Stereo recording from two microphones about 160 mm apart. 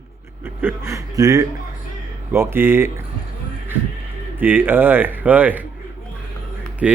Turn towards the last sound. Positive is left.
turn(degrees=-10)  # may be behind; listen again after turning